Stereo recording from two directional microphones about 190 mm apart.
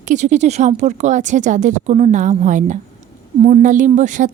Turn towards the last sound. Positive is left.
turn(degrees=-40)  # may be behind; listen again after turning